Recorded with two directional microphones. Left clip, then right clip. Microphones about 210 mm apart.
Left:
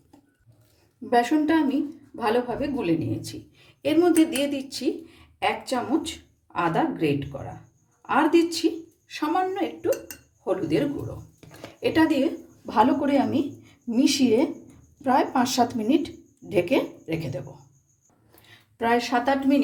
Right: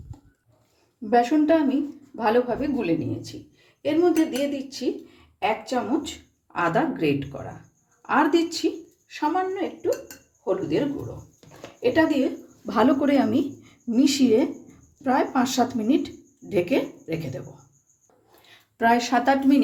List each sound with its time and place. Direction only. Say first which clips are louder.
1.1 s speech: right 2 dB; 5° left (ahead or behind)
3.8 s speech: left 1 dB; 25° left (ahead or behind)
5.4 s speech: right 1 dB; 10° left (ahead or behind)
9.0 s a woman's voice: even; 15° left (ahead or behind)
12.6 s a woman's voice: even; 15° right (ahead or behind); by 17.4 s 5° left (ahead or behind)
18.4 s speech: right 4 dB; 10° right (ahead or behind)